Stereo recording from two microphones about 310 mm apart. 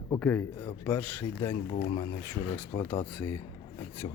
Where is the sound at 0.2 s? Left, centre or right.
Centre.